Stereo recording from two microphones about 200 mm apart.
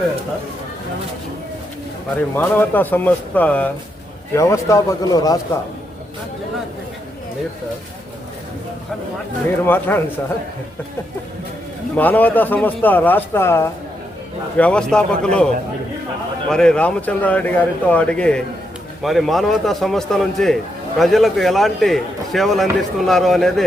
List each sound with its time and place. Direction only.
2.1 s speech: 10° left (ahead or behind)
9.6 s speech: 10° left (ahead or behind)
11.9 s a man's voice: 10° left (ahead or behind)
16.5 s a man's voice: 5° left (ahead or behind)